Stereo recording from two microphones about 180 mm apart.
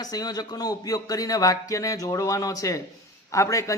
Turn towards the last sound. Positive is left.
turn(degrees=15)  # may be behind; listen again after turning